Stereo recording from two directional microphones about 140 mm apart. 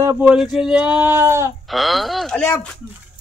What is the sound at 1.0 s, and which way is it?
Speech, 20° right (ahead or behind).